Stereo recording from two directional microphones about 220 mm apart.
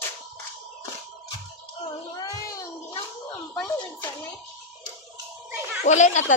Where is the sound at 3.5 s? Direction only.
5° left (ahead or behind).